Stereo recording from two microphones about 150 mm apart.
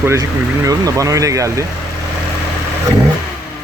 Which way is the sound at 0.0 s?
20° right (ahead or behind).